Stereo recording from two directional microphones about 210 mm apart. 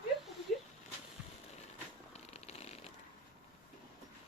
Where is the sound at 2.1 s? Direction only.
30° left (ahead or behind).